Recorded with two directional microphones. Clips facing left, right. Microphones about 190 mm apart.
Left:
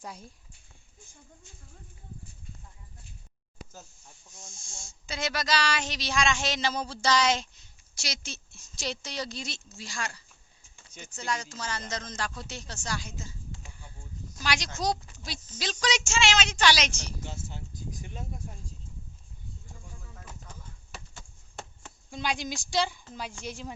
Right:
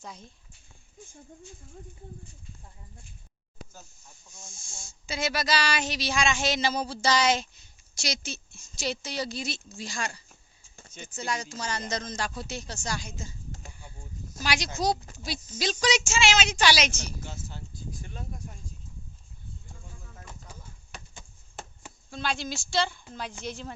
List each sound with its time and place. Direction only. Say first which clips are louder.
0.0 s a woman's voice: left 1 dB; 10° left (ahead or behind)
4.9 s speech: right 3 dB; 5° right (ahead or behind)
8.2 s speech: right 4 dB; centre (ahead or behind); by 10.2 s 20° right (ahead or behind)
11.1 s speech: right 1 dB; 10° right (ahead or behind)
14.4 s speech: right 2 dB; 10° right (ahead or behind)
17.2 s a sound: left 1 dB; 20° left (ahead or behind)
20.9 s a sound: even; centre (ahead or behind)
22.1 s a woman's voice: even; 15° left (ahead or behind)